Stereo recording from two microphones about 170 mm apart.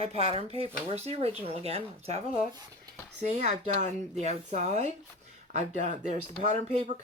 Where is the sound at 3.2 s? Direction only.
40° right (ahead or behind).